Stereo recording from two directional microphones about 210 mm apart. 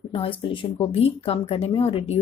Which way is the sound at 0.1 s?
25° left (ahead or behind).